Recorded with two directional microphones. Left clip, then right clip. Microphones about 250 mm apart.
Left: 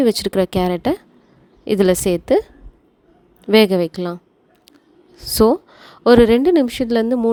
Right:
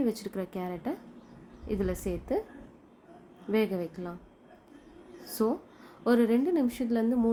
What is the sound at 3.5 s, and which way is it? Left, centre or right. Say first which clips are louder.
Speech: left 16 dB; left.